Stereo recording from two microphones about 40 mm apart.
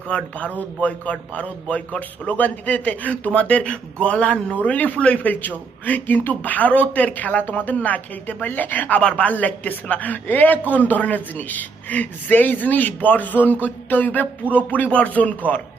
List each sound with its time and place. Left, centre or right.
0.1 s a man's voice: left
9.0 s speech: left
9.2 s a man's voice: left